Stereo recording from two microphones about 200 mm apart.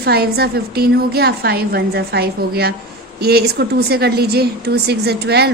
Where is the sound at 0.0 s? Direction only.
50° right (ahead or behind).